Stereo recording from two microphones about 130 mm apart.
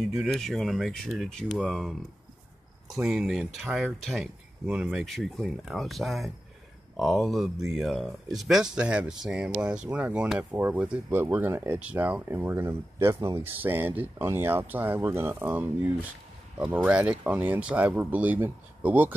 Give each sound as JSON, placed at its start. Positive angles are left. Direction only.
{"t": 0.1, "sound": "speech", "side_deg": 0}